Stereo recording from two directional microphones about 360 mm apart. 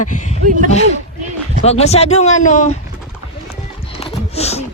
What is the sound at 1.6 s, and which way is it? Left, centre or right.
Speech, centre.